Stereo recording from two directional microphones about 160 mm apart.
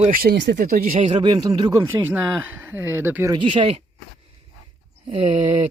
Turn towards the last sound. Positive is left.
turn(degrees=-40)  # may be behind; listen again after turning